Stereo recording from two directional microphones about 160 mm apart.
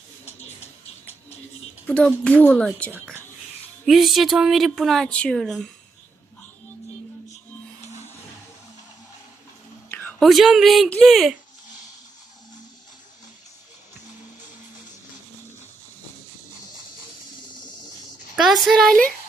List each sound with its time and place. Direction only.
1.9 s a woman's voice: 5° left (ahead or behind)
9.9 s a sound: 10° left (ahead or behind)
10.2 s speech: centre (ahead or behind)
18.3 s speech: centre (ahead or behind)